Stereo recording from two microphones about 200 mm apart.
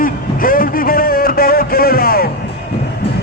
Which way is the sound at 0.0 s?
45° left (ahead or behind).